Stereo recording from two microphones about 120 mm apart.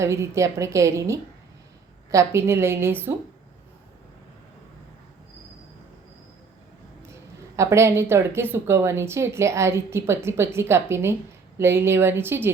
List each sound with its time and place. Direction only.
0.0 s speech: 25° right (ahead or behind)
7.0 s speech: 25° right (ahead or behind)